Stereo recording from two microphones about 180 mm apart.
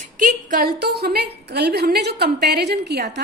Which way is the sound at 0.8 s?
65° right (ahead or behind).